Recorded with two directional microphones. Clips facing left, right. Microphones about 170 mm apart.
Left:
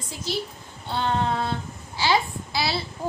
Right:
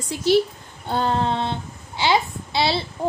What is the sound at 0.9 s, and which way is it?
A woman's voice, 35° right (ahead or behind).